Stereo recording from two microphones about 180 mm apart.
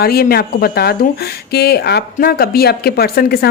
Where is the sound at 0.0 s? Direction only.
55° left (ahead or behind).